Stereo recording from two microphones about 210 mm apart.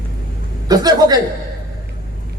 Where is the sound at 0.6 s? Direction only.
20° right (ahead or behind).